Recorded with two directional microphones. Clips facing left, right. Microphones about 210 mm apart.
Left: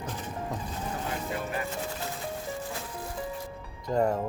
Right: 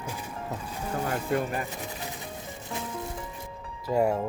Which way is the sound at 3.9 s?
10° right (ahead or behind).